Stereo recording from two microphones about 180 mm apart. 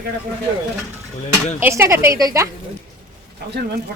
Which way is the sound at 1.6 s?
15° right (ahead or behind).